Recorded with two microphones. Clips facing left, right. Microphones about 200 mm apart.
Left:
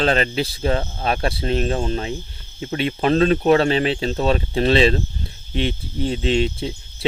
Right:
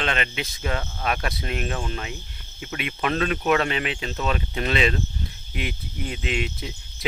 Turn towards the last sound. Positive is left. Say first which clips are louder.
# left 7 dB
turn(degrees=30)  # may be behind; listen again after turning